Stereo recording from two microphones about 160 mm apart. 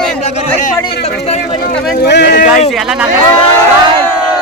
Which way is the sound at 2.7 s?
Centre (ahead or behind).